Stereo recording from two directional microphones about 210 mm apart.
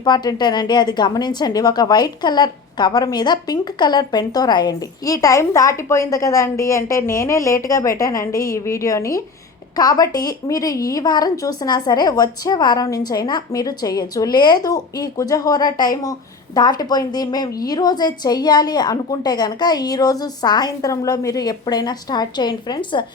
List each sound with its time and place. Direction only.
0.0 s a woman's voice: 20° left (ahead or behind)